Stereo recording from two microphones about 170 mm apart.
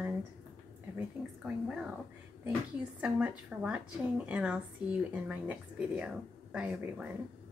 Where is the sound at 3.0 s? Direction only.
5° right (ahead or behind).